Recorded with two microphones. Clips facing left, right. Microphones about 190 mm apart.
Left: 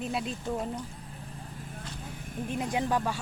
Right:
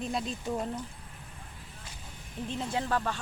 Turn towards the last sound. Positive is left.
turn(degrees=15)  # may be behind; listen again after turning